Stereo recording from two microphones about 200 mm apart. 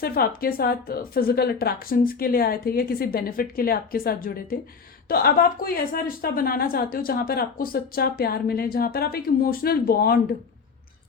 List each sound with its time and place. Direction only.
0.0 s a woman's voice: 50° left (ahead or behind)